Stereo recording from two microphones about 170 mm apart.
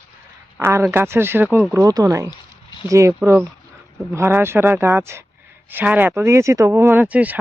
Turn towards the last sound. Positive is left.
turn(degrees=-10)  # may be behind; listen again after turning